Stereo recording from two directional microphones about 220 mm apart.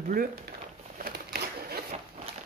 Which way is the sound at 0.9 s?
45° right (ahead or behind).